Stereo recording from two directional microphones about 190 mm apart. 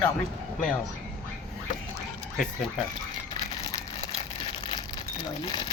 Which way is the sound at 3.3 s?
25° left (ahead or behind).